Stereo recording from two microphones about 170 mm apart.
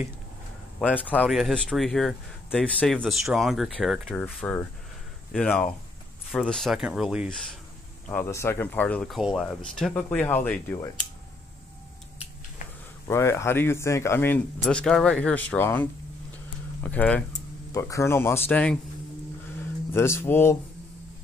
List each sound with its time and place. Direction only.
0.9 s speech: 10° left (ahead or behind)
8.1 s speech: 15° left (ahead or behind)
13.1 s speech: 15° left (ahead or behind)
19.9 s speech: 15° left (ahead or behind)